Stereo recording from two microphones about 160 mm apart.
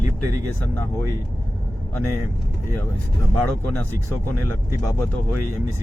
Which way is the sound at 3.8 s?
15° left (ahead or behind).